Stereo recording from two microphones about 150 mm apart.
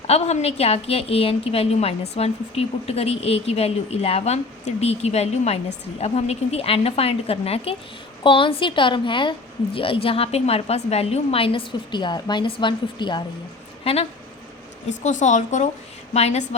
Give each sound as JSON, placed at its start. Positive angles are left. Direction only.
{"t": 0.1, "sound": "a woman's voice", "side_deg": 45}
{"t": 13.8, "sound": "a woman's voice", "side_deg": 40}
{"t": 14.8, "sound": "a woman's voice", "side_deg": 55}